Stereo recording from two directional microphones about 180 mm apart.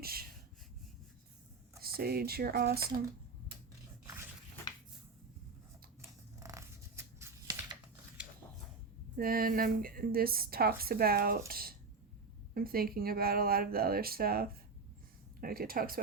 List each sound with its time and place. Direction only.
0.0 s a sound: 55° right (ahead or behind)
1.8 s a woman's voice: 60° right (ahead or behind)
6.0 s scissors: 15° right (ahead or behind)
9.1 s a woman's voice: 55° right (ahead or behind)